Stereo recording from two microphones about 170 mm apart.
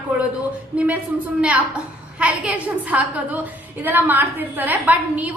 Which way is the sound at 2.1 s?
5° right (ahead or behind).